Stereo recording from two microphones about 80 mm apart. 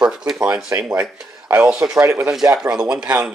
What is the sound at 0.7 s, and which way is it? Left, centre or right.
Speech, right.